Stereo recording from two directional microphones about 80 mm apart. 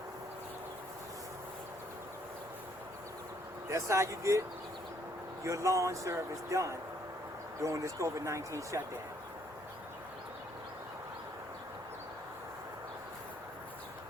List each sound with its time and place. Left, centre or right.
3.7 s speech: right